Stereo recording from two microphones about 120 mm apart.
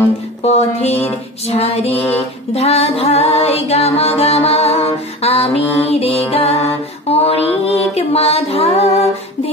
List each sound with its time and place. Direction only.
0.4 s music: 60° left (ahead or behind)
1.5 s mantra: 55° left (ahead or behind)
2.5 s music: 60° left (ahead or behind)